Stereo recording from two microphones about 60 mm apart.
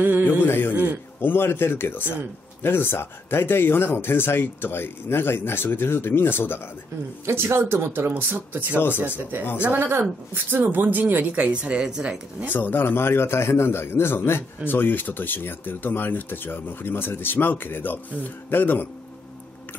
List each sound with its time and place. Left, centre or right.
0.0 s speech: right
0.4 s a man's voice: left
7.5 s speech: right
8.7 s a man's voice: left
9.6 s speech: right; by 12.2 s centre
12.5 s a man's voice: left